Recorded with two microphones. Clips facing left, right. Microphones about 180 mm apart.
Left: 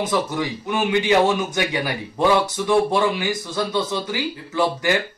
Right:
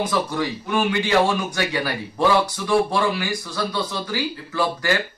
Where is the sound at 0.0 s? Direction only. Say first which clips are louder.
Left 1 dB; 20° left (ahead or behind).